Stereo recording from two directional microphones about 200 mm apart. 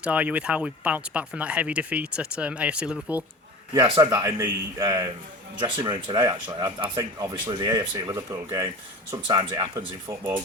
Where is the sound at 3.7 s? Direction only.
20° right (ahead or behind).